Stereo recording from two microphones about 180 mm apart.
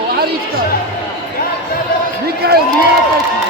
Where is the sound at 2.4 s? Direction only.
60° right (ahead or behind).